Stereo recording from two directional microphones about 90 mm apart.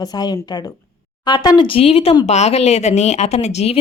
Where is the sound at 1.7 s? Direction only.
90° left.